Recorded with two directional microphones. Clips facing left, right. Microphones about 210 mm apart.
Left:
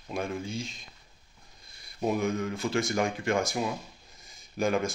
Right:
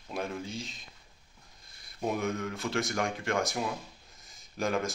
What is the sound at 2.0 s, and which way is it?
Speech, centre (ahead or behind).